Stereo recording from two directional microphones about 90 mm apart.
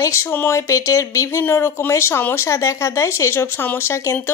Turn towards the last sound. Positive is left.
turn(degrees=30)  # may be behind; listen again after turning